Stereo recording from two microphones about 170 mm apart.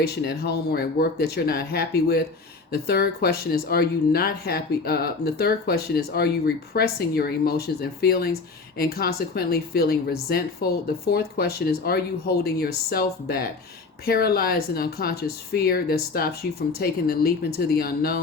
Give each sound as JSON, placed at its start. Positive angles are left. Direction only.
{"t": 0.3, "sound": "speech", "side_deg": 70}